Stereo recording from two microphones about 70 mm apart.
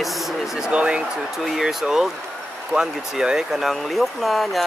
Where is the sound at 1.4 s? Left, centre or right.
Centre.